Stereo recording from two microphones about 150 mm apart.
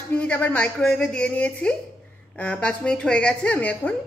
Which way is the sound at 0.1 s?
10° left (ahead or behind).